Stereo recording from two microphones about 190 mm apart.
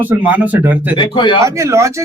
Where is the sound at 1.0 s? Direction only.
25° left (ahead or behind).